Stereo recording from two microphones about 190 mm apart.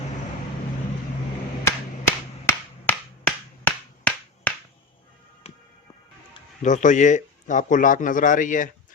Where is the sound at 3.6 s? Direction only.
10° left (ahead or behind).